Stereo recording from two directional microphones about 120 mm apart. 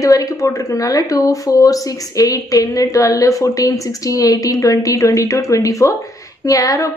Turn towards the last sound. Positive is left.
turn(degrees=30)  # may be behind; listen again after turning